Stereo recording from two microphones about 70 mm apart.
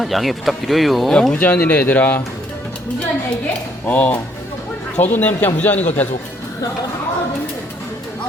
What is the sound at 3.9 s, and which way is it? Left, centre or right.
A man's voice, left.